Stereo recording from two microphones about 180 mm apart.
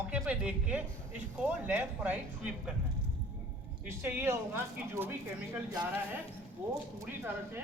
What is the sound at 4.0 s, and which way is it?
A man's voice, 15° right (ahead or behind).